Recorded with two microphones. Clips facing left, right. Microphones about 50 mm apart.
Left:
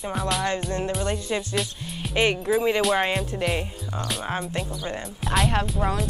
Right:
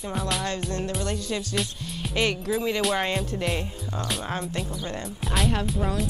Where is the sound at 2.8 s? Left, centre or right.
Centre.